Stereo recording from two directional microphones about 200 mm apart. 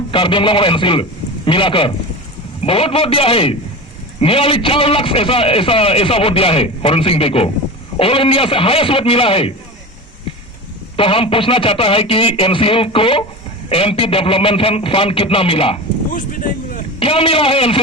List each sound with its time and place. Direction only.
0.1 s a man's voice: 25° left (ahead or behind)
10.9 s a man's voice: 25° left (ahead or behind)
16.1 s a sound: 40° left (ahead or behind)
17.0 s a man's voice: 30° left (ahead or behind)